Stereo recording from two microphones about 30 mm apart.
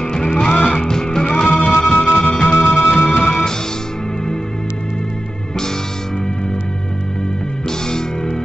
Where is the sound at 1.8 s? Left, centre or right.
Left.